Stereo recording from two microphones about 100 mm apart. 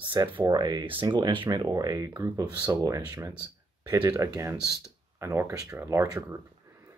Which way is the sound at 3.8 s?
45° right (ahead or behind).